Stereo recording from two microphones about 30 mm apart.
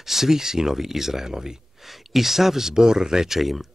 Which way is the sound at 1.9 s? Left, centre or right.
Centre.